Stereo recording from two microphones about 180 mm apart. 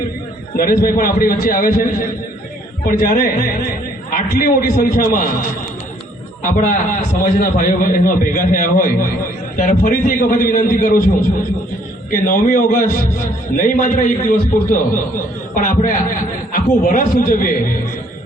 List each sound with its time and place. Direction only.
0.5 s a man's voice: 55° left (ahead or behind)
6.4 s a man's voice: 45° left (ahead or behind)
12.2 s a man's voice: 50° left (ahead or behind)